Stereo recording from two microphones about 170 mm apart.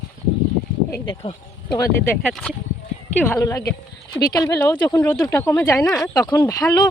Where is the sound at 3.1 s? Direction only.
10° left (ahead or behind).